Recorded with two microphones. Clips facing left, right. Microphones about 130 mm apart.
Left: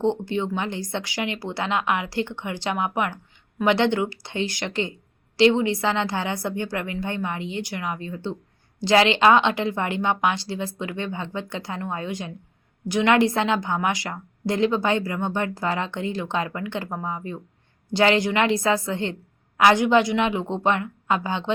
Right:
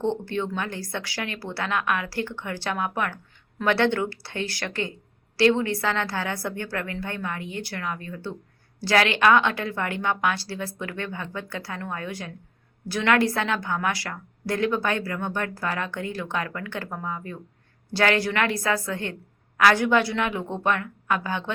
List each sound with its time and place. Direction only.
0.0 s a woman's voice: 15° left (ahead or behind)